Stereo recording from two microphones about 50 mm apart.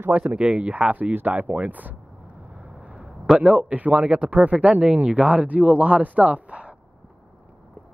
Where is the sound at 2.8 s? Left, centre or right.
Right.